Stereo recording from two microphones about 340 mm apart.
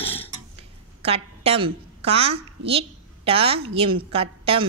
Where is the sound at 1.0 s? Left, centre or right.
Centre.